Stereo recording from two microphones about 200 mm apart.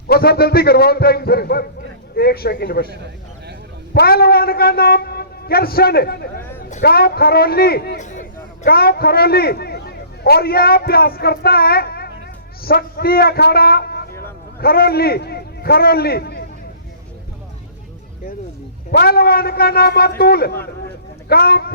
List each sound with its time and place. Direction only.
0.1 s a man's voice: 50° left (ahead or behind)
2.9 s a sound: 55° right (ahead or behind)
3.9 s a man's voice: 50° left (ahead or behind)
6.6 s a sound: 35° left (ahead or behind)
6.8 s a man's voice: 50° left (ahead or behind)
8.0 s a man's voice: 40° left (ahead or behind)
18.9 s a man's voice: 50° left (ahead or behind)